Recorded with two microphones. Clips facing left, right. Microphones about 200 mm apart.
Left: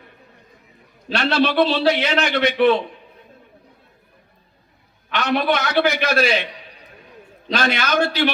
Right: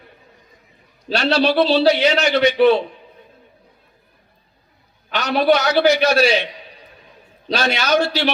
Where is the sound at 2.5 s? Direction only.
35° right (ahead or behind).